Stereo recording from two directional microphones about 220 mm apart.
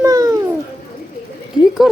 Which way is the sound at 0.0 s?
15° right (ahead or behind).